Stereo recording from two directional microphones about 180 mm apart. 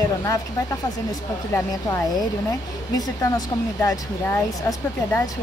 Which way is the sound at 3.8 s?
15° left (ahead or behind).